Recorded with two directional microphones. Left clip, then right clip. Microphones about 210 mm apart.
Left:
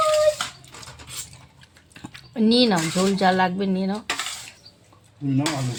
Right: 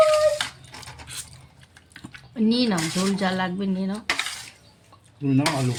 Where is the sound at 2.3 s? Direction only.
30° left (ahead or behind).